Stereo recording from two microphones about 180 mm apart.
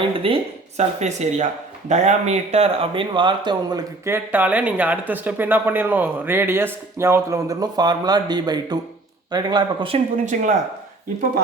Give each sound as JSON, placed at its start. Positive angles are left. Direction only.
{"t": 0.1, "sound": "a man's voice", "side_deg": -30}